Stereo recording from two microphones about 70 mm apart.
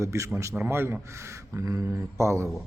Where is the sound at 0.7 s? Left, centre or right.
Right.